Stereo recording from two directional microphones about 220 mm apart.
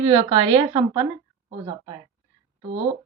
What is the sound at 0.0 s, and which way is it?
Speech, 25° right (ahead or behind).